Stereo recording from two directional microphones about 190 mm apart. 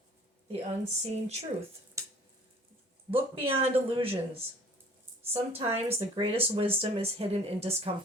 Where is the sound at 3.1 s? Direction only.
30° right (ahead or behind).